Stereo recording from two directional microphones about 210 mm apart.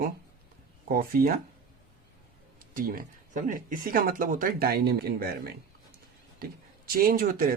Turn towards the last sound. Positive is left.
turn(degrees=-45)  # may be behind; listen again after turning